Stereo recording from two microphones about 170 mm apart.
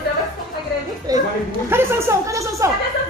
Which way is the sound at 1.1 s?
20° right (ahead or behind).